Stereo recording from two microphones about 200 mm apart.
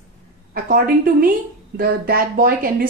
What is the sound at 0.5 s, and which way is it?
A woman's voice, 45° right (ahead or behind).